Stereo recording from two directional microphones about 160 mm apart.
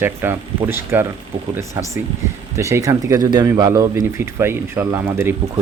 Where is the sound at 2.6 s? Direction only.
20° right (ahead or behind).